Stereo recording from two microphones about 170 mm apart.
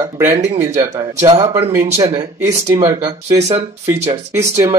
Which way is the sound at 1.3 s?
35° right (ahead or behind).